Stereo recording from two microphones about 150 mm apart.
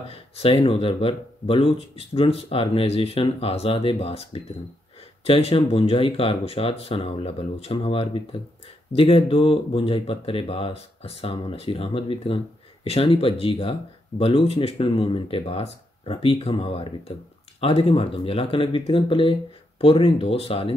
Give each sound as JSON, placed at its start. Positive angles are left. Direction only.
{"t": 0.1, "sound": "speech", "side_deg": 40}